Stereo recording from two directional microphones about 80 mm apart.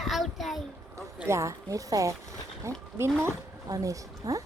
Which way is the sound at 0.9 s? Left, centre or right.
Right.